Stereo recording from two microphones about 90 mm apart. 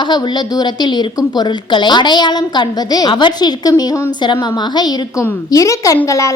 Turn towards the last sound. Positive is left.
turn(degrees=35)  # may be behind; listen again after turning